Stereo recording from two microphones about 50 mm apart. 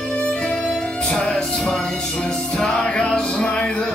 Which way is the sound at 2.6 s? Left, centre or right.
Left.